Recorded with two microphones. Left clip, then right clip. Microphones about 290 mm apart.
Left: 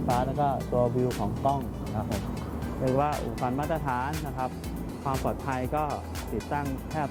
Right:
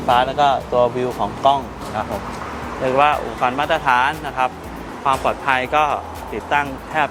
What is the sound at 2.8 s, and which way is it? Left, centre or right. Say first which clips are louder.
Speech: right 11 dB; centre.